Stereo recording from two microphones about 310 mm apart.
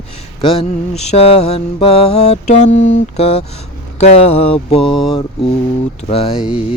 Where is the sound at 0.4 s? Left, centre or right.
Centre.